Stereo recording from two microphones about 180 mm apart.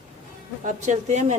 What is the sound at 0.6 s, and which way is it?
Speech, 40° right (ahead or behind).